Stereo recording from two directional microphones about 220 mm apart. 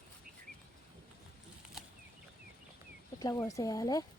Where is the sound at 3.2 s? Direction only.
15° left (ahead or behind).